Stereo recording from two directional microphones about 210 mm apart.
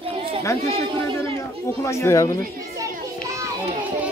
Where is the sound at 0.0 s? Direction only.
25° right (ahead or behind).